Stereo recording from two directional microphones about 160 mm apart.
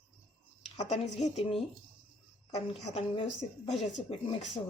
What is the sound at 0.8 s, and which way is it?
A woman's voice, 45° left (ahead or behind).